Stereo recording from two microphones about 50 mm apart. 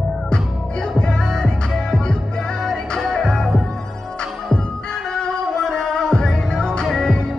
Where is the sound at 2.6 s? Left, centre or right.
Centre.